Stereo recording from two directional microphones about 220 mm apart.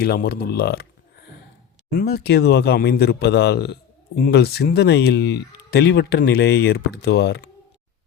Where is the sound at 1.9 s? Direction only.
45° left (ahead or behind).